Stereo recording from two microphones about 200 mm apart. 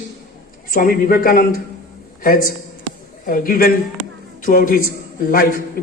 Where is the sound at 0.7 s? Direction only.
45° left (ahead or behind).